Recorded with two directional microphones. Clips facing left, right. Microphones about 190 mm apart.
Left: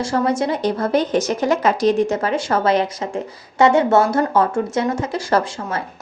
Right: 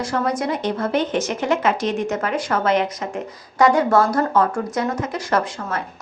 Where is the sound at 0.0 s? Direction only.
30° left (ahead or behind).